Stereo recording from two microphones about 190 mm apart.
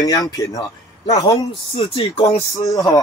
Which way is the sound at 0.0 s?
20° left (ahead or behind).